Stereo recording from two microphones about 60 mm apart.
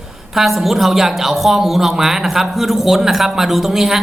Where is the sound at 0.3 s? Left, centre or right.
Centre.